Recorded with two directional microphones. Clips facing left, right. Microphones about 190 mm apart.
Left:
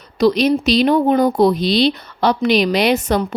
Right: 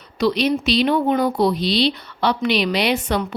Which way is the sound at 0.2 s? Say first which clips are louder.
Left 5 dB; 40° left (ahead or behind).